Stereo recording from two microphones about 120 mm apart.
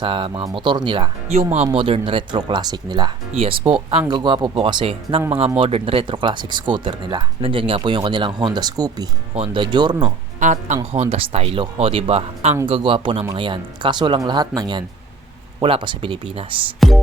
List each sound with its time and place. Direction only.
0.0 s speech: 45° right (ahead or behind)
1.3 s speech: 60° right (ahead or behind); by 3.1 s 35° right (ahead or behind)
3.3 s speech: 55° right (ahead or behind)
3.7 s speech: 45° right (ahead or behind)
9.3 s speech: 50° right (ahead or behind)
10.4 s speech: 90° right
10.9 s speech: 60° right (ahead or behind)
12.6 s speech: 45° right (ahead or behind)
15.6 s speech: 45° right (ahead or behind)